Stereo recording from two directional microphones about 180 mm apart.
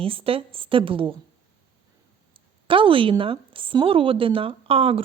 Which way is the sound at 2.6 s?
30° right (ahead or behind).